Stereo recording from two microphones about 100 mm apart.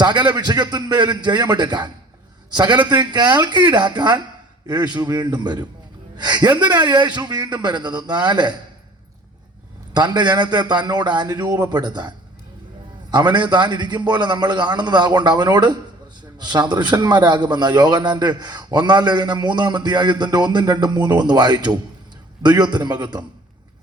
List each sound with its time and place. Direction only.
0.0 s a man's voice: 45° right (ahead or behind)
9.9 s a man's voice: 45° right (ahead or behind)